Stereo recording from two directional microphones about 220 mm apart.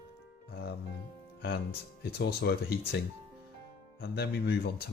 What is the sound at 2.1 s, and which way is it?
Speech, 45° left (ahead or behind).